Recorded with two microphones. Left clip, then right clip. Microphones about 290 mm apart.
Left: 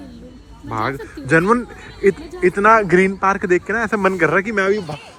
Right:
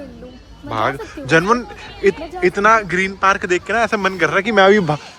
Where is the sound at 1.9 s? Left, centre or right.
Right.